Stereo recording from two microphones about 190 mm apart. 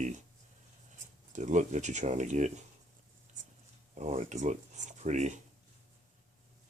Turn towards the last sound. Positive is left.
turn(degrees=-40)  # may be behind; listen again after turning